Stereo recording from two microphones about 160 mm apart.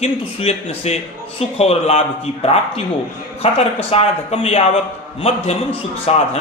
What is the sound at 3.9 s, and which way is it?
Speech, 35° left (ahead or behind).